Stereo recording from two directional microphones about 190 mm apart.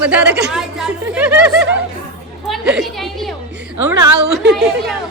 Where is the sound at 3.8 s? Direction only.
15° right (ahead or behind).